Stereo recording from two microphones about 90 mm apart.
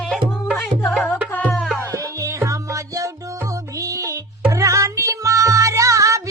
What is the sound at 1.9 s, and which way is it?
Music, 35° right (ahead or behind).